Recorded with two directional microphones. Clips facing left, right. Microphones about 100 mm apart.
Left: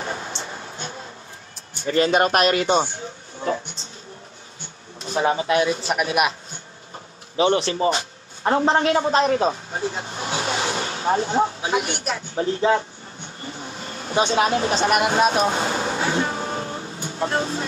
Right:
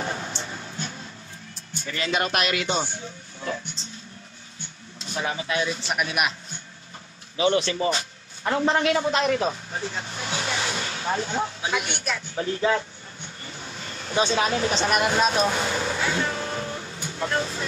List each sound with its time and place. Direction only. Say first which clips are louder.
0.0 s music: left 1 dB; 30° left (ahead or behind)
1.9 s speech: left 8 dB; 40° left (ahead or behind)
3.4 s a sound: left 6 dB; 30° left (ahead or behind)
5.0 s speech: left 8 dB; 35° left (ahead or behind)
7.3 s a man's voice: left 3 dB; 30° left (ahead or behind)
12.0 s vehicle: left 4 dB; 30° left (ahead or behind)